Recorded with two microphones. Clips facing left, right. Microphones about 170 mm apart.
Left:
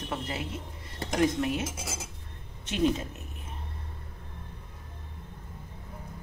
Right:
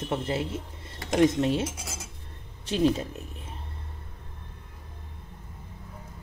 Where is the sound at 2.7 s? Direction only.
35° right (ahead or behind).